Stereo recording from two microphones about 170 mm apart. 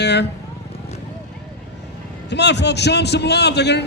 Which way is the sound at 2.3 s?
90° left.